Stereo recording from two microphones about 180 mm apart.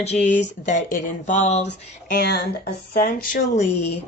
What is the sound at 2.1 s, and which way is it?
Speech, 60° left (ahead or behind).